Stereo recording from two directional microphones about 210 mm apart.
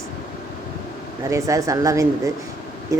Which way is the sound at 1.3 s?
15° right (ahead or behind).